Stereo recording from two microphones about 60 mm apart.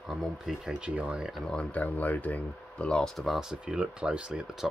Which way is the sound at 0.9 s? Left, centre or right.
Right.